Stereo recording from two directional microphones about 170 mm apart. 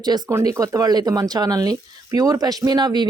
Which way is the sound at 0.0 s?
25° right (ahead or behind).